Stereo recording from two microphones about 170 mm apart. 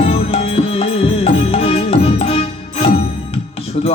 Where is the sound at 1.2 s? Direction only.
35° left (ahead or behind).